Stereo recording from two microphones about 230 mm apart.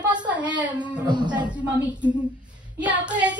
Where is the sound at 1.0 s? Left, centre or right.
Centre.